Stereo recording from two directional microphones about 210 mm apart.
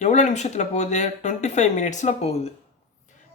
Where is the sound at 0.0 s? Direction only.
35° left (ahead or behind).